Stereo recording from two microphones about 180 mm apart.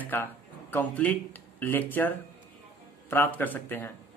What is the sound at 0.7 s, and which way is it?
Speech, 10° left (ahead or behind).